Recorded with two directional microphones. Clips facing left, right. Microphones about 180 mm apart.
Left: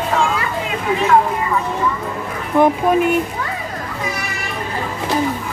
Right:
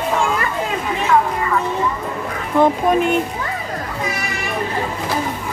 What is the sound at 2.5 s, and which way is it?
Speech, 10° left (ahead or behind).